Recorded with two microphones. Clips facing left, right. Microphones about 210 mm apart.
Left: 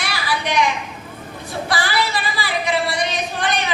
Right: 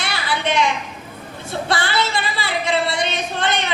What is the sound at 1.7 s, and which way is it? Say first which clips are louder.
Speech: even; 25° right (ahead or behind).